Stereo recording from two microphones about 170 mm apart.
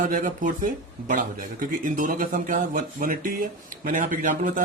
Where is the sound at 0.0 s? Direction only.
50° right (ahead or behind).